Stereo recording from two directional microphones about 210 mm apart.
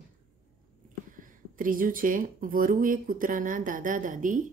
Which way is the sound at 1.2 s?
40° right (ahead or behind).